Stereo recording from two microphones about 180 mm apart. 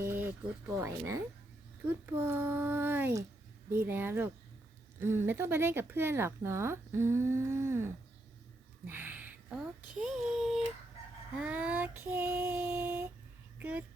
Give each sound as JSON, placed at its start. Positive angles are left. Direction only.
{"t": 0.0, "sound": "speech", "side_deg": -10}
{"t": 8.9, "sound": "a sound", "side_deg": -10}
{"t": 10.0, "sound": "a woman's voice", "side_deg": 0}